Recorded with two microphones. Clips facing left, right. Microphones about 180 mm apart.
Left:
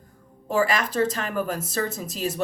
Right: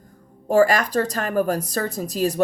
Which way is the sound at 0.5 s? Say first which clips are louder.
Right 6 dB; 40° right (ahead or behind).